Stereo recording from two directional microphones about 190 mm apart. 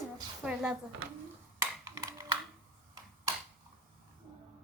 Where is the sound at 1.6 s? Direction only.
15° right (ahead or behind).